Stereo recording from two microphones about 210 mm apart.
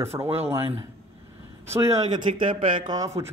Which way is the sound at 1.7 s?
15° right (ahead or behind).